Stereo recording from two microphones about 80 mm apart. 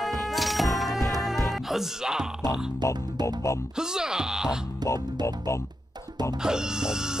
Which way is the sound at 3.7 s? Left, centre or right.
Centre.